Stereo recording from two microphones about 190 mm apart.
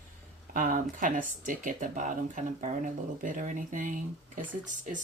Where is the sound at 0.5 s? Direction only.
45° right (ahead or behind).